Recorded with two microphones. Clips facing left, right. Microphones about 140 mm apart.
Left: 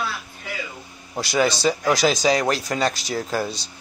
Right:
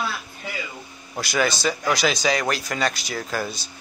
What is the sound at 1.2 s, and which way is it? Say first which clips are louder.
A man's voice: left 3 dB; 30° left (ahead or behind).